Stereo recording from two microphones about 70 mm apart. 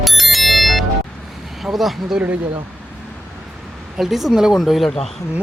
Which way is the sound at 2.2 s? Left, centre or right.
Right.